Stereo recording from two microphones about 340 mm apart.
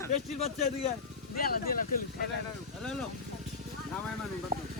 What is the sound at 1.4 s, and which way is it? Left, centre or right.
Speech, left.